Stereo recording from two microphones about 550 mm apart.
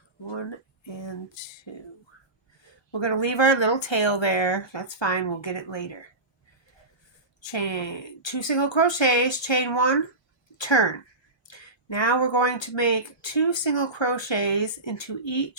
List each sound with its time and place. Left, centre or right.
0.9 s speech: left
2.9 s speech: left
7.4 s speech: left